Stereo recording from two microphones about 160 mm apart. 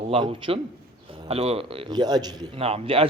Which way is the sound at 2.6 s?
35° right (ahead or behind).